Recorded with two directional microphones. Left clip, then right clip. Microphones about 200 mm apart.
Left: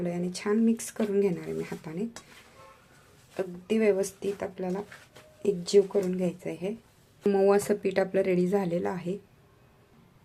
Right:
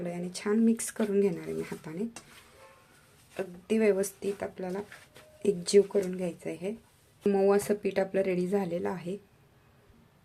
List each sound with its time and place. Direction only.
0.0 s speech: centre (ahead or behind)
3.3 s speech: centre (ahead or behind)